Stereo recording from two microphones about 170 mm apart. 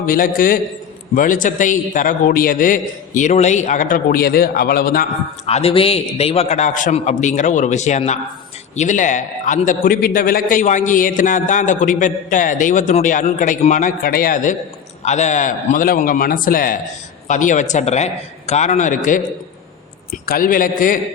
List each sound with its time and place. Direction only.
0.0 s a man's voice: 55° left (ahead or behind)
5.5 s a man's voice: 35° left (ahead or behind); by 14.5 s 55° left (ahead or behind)
15.0 s a man's voice: 45° left (ahead or behind)
20.2 s a man's voice: 60° left (ahead or behind)